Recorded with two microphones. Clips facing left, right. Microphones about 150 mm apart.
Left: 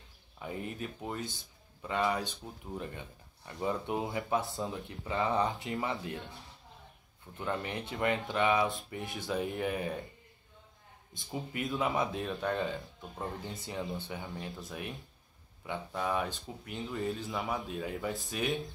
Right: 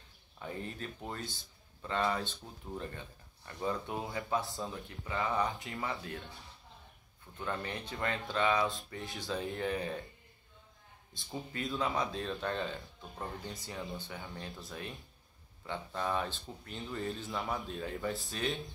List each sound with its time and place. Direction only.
0.4 s speech: 15° left (ahead or behind)
7.3 s speech: 15° left (ahead or behind)
11.2 s speech: 15° left (ahead or behind)
15.6 s speech: 10° left (ahead or behind)